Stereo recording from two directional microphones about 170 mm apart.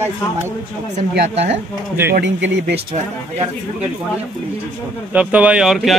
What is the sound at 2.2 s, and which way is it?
Speech, 90° right.